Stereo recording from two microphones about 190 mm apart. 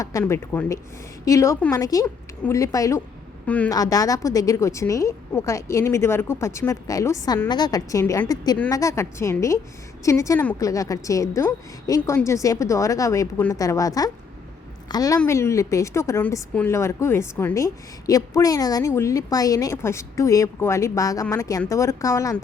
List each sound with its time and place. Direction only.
0.0 s a woman's voice: 15° left (ahead or behind)
3.7 s a woman's voice: 20° left (ahead or behind)